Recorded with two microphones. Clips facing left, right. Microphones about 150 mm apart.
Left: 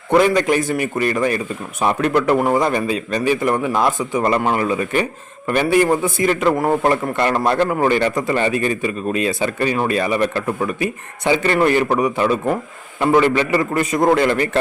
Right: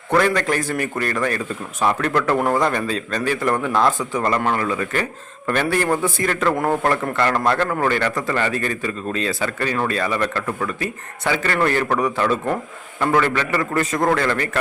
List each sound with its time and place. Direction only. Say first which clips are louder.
0.1 s a man's voice: left 4 dB; 15° left (ahead or behind)